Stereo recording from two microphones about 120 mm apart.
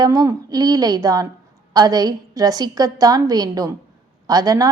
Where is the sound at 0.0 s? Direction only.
30° right (ahead or behind).